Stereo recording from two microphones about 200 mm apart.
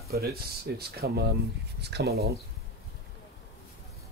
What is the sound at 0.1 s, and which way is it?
Speech, 50° right (ahead or behind).